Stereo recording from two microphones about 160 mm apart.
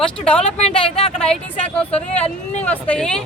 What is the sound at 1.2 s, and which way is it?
Speech, 5° left (ahead or behind).